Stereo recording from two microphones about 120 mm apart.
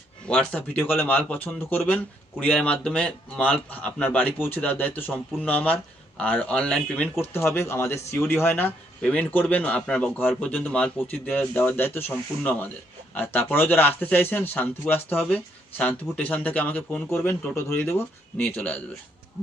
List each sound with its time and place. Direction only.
0.3 s speech: 10° left (ahead or behind)